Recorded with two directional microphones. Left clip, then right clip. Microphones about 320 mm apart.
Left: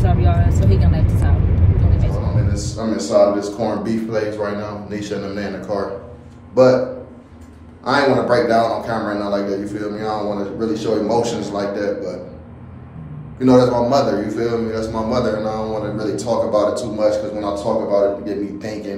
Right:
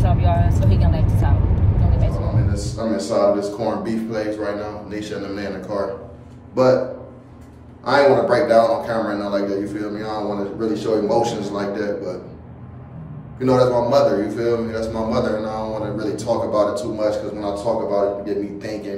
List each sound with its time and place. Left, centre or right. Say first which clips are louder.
0.0 s vehicle: even; centre
2.0 s a sound: left 1 dB; centre
4.1 s a man's voice: left 2 dB; centre
7.8 s a man's voice: right 1 dB; centre
13.4 s a man's voice: left 3 dB; centre